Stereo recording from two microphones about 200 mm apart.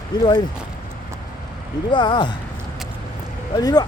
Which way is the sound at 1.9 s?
25° left (ahead or behind).